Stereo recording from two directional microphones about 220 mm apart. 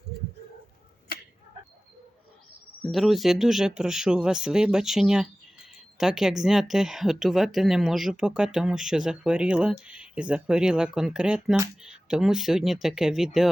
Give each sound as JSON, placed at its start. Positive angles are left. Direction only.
{"t": 2.8, "sound": "speech", "side_deg": 0}